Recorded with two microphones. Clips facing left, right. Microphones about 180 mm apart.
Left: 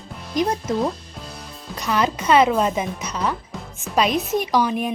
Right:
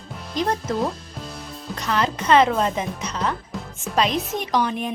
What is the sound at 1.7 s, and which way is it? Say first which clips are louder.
Speech: left 2 dB; 10° left (ahead or behind).